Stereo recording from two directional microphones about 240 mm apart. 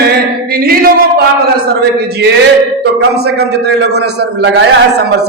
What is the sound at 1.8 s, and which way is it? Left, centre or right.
A man's voice, right.